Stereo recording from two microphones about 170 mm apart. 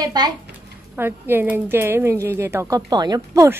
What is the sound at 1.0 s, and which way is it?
A woman's voice, 10° right (ahead or behind).